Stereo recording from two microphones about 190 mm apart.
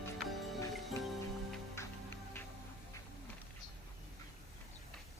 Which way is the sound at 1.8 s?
15° left (ahead or behind).